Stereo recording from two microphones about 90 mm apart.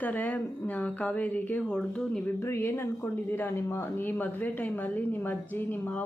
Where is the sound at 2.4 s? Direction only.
30° left (ahead or behind).